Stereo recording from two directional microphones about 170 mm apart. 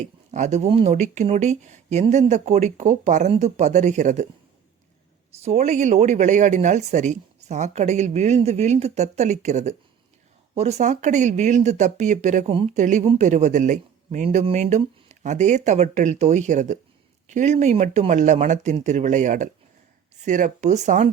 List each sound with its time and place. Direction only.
0.0 s speech: 45° right (ahead or behind)
5.4 s speech: 40° right (ahead or behind)